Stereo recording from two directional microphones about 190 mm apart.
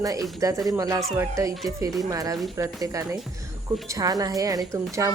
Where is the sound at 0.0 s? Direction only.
20° right (ahead or behind).